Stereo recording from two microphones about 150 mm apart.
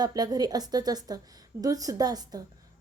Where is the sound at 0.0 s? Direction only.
25° right (ahead or behind).